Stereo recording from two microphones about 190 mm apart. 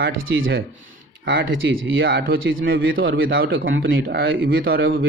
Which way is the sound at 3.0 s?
50° right (ahead or behind).